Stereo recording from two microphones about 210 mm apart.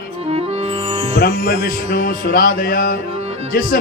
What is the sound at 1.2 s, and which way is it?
Music, 40° left (ahead or behind).